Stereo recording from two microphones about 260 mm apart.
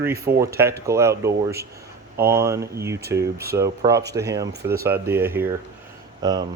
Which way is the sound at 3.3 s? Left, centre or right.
Right.